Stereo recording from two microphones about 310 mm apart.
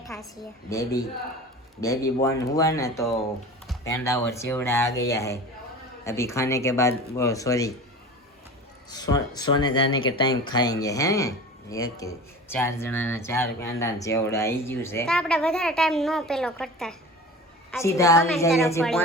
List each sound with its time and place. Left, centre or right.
0.0 s a sound: centre
1.8 s speech: centre
8.9 s speech: centre